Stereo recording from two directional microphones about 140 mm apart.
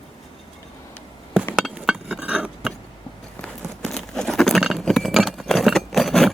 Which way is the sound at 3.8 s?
5° left (ahead or behind).